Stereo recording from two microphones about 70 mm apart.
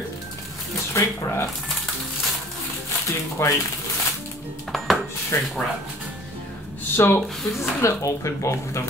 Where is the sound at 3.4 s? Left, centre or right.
Left.